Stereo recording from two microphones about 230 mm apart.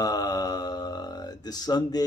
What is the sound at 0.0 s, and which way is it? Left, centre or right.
Mantra, centre.